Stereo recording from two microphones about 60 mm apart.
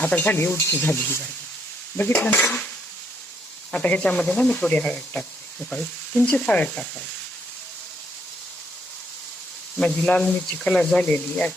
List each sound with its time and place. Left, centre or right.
0.0 s speech: left
2.2 s speech: left
3.7 s speech: left
9.7 s speech: centre